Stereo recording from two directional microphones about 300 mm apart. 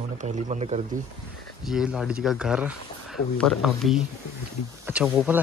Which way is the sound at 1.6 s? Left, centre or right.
Centre.